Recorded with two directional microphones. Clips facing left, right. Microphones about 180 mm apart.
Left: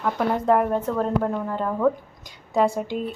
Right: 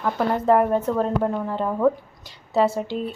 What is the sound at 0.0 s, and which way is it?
Speech, centre (ahead or behind).